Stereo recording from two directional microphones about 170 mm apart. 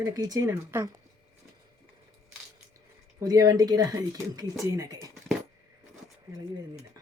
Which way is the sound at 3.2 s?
20° right (ahead or behind).